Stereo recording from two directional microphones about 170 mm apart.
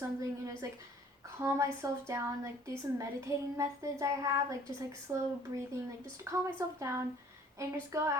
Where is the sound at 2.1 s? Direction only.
15° right (ahead or behind).